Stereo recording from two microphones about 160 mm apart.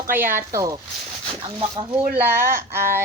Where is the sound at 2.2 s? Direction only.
15° right (ahead or behind).